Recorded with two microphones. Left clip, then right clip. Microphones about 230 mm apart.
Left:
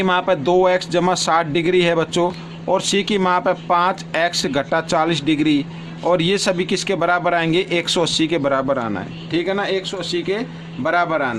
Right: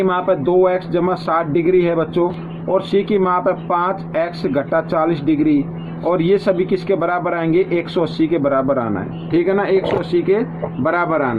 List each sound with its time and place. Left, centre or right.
0.0 s a man's voice: left
9.3 s speech: left